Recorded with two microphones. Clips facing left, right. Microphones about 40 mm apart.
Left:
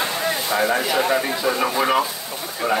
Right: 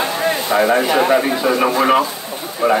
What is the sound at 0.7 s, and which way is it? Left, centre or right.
A man's voice, right.